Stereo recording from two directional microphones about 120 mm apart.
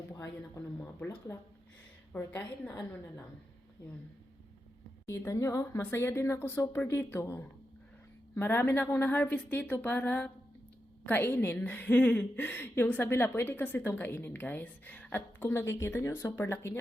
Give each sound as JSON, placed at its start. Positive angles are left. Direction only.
{"t": 2.1, "sound": "a woman's voice", "side_deg": 15}
{"t": 5.0, "sound": "a woman's voice", "side_deg": 25}